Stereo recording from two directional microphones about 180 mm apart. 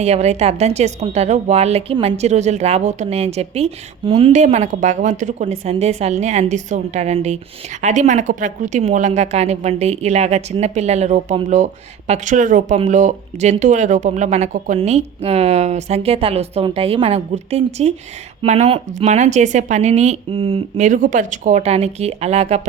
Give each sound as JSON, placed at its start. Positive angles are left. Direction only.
{"t": 0.0, "sound": "a woman's voice", "side_deg": -35}